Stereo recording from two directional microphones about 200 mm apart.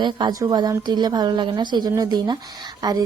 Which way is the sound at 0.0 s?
20° right (ahead or behind).